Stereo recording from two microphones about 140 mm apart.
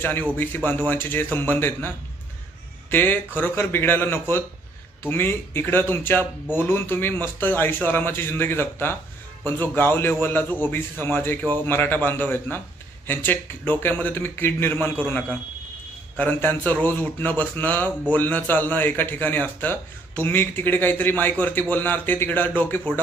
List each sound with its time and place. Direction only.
0.0 s speech: 15° left (ahead or behind)
2.9 s speech: 15° left (ahead or behind)